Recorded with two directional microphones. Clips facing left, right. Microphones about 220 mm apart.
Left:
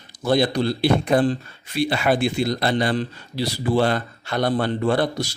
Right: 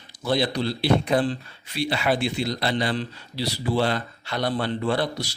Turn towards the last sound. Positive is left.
turn(degrees=50)  # may be behind; listen again after turning